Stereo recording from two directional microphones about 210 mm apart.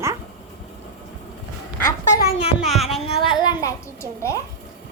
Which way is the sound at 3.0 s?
25° left (ahead or behind).